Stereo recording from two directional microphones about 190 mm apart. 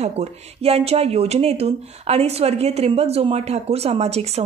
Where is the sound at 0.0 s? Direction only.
35° right (ahead or behind).